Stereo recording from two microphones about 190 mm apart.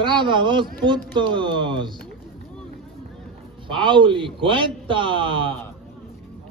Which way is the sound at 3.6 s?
25° right (ahead or behind).